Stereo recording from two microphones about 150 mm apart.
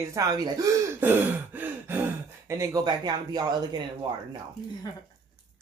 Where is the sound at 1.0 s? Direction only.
15° right (ahead or behind).